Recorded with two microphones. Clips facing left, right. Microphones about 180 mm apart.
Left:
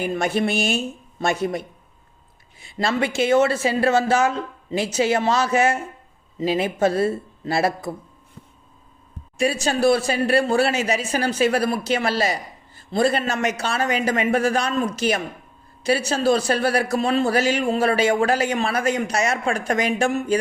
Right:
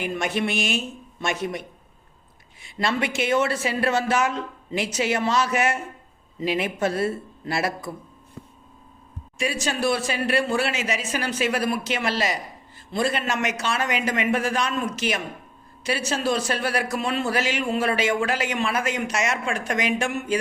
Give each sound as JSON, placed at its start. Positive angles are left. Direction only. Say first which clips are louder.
{"t": 0.0, "sound": "a man's voice", "louder": "left 4 dB", "side_deg": 35}
{"t": 3.0, "sound": "speech", "louder": "left 6 dB", "side_deg": 30}
{"t": 9.4, "sound": "a man's voice", "louder": "left 6 dB", "side_deg": 35}